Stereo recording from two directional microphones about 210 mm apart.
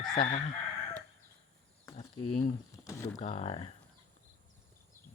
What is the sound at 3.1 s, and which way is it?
Chicken, 30° left (ahead or behind).